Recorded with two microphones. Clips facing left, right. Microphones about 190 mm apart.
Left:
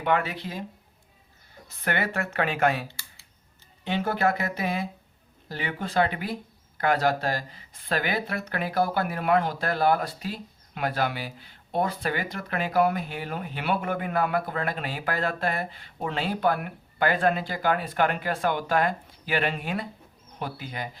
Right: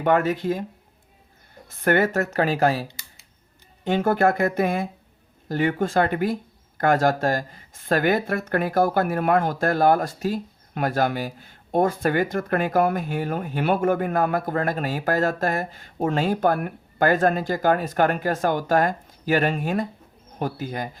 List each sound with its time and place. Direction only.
0.0 s speech: 45° right (ahead or behind)
1.7 s speech: 50° right (ahead or behind)
2.8 s computer keyboard: 20° right (ahead or behind)
3.8 s speech: 50° right (ahead or behind)